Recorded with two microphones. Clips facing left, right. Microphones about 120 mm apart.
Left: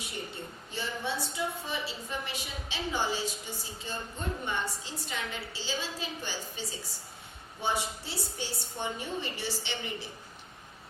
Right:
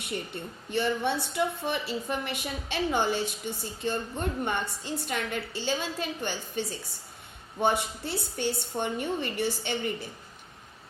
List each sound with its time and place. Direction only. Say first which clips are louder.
0.7 s a woman's voice: right 8 dB; 60° right (ahead or behind)